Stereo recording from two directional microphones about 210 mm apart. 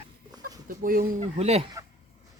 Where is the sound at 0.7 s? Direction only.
40° right (ahead or behind).